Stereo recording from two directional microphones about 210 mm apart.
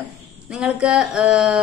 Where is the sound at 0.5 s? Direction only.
5° right (ahead or behind).